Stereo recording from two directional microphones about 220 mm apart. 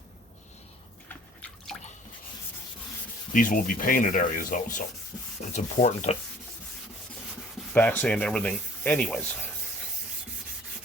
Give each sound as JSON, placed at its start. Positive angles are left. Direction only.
{"t": 3.3, "sound": "speech", "side_deg": 40}
{"t": 7.7, "sound": "speech", "side_deg": 5}